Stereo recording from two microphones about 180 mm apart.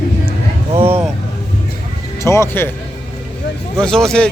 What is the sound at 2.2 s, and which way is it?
Speech, 15° left (ahead or behind).